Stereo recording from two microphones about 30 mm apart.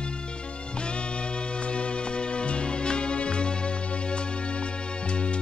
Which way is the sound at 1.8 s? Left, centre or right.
Left.